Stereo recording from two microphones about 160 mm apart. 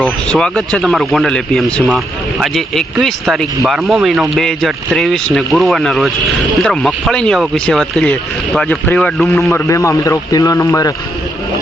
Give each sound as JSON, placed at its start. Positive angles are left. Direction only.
{"t": 0.0, "sound": "speech", "side_deg": 5}
{"t": 9.3, "sound": "a man's voice", "side_deg": 15}